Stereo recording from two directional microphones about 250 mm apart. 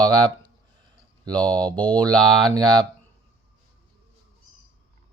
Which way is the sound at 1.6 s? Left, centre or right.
Centre.